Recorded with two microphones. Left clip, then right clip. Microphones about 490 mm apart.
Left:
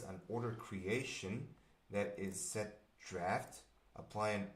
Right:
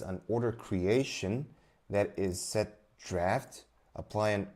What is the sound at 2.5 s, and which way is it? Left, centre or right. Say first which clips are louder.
Speech: right 11 dB; right.